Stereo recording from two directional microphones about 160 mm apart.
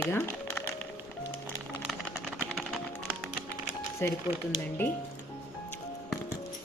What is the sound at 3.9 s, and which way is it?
Speech, 15° left (ahead or behind).